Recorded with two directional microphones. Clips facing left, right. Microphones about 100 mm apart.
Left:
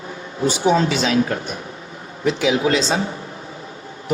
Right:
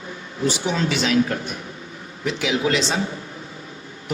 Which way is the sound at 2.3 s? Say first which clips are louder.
Left 4 dB; 30° left (ahead or behind).